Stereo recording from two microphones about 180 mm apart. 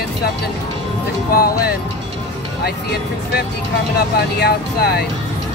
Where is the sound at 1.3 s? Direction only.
55° left (ahead or behind).